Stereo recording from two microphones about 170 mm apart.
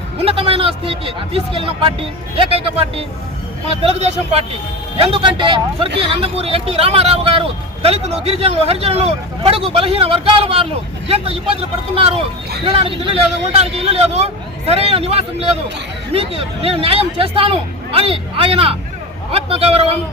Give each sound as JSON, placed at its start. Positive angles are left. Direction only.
{"t": 0.3, "sound": "speech", "side_deg": -35}
{"t": 11.9, "sound": "speech", "side_deg": -35}